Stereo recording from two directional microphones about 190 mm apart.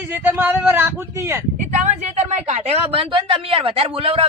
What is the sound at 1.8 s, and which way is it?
Speech, 35° right (ahead or behind).